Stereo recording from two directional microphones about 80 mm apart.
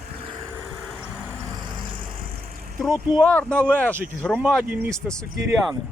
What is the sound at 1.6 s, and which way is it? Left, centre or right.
Vehicle, right.